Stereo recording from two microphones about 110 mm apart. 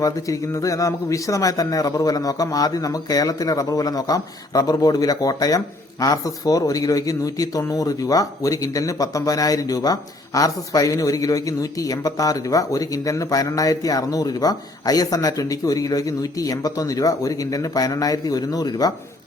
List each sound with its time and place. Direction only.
0.0 s speech: 30° left (ahead or behind)